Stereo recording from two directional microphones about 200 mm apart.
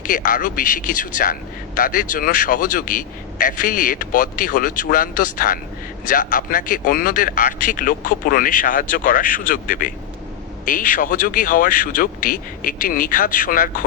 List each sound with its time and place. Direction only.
0.0 s a man's voice: 40° left (ahead or behind)